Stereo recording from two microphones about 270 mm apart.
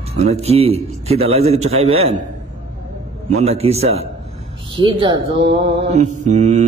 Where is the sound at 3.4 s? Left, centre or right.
Right.